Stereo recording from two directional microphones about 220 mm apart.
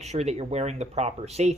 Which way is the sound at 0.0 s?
30° right (ahead or behind).